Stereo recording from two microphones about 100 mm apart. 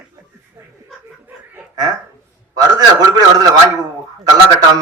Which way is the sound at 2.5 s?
45° right (ahead or behind).